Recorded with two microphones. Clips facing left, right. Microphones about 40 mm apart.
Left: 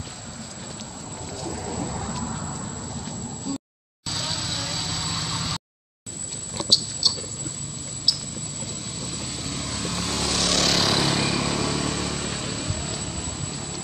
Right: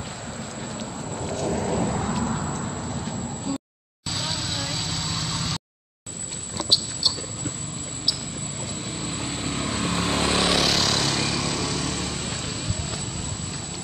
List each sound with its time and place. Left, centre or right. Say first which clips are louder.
1.3 s a sound: right 7 dB; right
4.1 s vehicle: right 1 dB; centre
6.7 s a sound: left 1 dB; centre
9.0 s vehicle: right 4 dB; right
10.5 s vehicle: right 1 dB; centre
10.8 s vehicle: left 1 dB; centre